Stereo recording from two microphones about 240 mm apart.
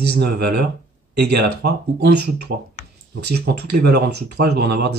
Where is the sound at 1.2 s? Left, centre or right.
Right.